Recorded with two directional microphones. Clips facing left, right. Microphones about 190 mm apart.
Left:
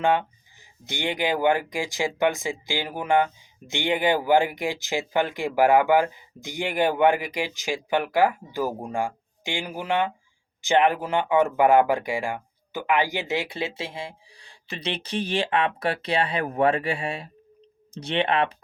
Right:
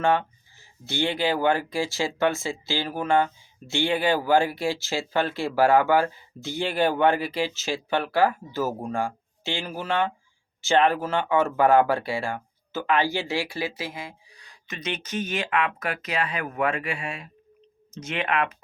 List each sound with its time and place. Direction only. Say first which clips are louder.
0.0 s speech: even; 15° left (ahead or behind)